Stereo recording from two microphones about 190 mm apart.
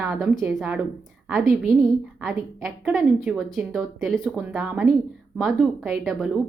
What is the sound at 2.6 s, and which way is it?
A woman's voice, centre (ahead or behind).